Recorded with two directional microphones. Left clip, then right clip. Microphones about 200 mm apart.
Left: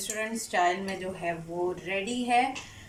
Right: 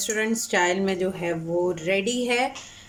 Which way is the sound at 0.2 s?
50° right (ahead or behind).